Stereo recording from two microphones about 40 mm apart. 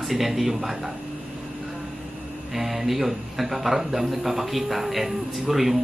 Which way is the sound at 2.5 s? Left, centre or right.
Centre.